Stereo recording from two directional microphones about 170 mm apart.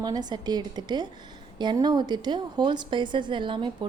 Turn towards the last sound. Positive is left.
turn(degrees=-30)  # may be behind; listen again after turning